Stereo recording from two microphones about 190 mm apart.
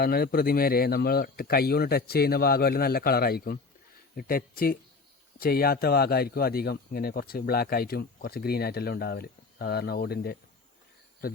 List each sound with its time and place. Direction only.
0.0 s a man's voice: 55° left (ahead or behind)